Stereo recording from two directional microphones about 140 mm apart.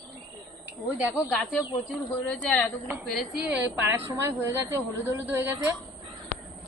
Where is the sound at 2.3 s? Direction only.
5° left (ahead or behind).